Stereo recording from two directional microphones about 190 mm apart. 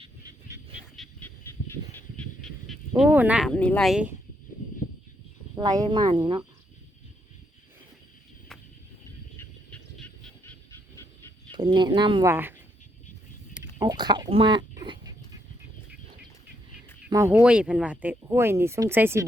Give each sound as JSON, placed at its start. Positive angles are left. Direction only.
{"t": 0.9, "sound": "honk", "side_deg": 10}
{"t": 3.0, "sound": "speech", "side_deg": -10}
{"t": 3.5, "sound": "speech", "side_deg": 5}
{"t": 5.5, "sound": "speech", "side_deg": -20}
{"t": 11.5, "sound": "speech", "side_deg": -25}
{"t": 12.2, "sound": "speech", "side_deg": -10}
{"t": 13.7, "sound": "speech", "side_deg": -20}
{"t": 17.1, "sound": "speech", "side_deg": -15}